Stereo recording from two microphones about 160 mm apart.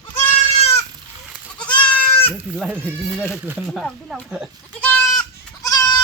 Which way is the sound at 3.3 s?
Centre (ahead or behind).